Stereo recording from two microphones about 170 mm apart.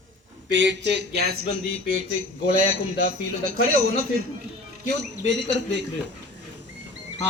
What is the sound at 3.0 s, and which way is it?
Speech, 55° right (ahead or behind).